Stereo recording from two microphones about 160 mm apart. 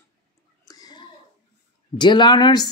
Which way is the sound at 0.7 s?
25° left (ahead or behind).